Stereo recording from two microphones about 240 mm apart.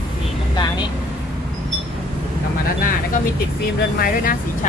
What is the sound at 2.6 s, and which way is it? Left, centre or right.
Speech, left.